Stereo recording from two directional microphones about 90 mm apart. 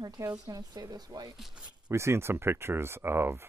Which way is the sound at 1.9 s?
30° right (ahead or behind).